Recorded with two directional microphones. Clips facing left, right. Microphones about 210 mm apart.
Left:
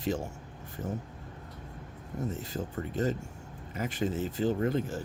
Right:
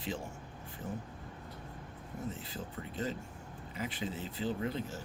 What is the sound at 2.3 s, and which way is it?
Speech, 45° left (ahead or behind).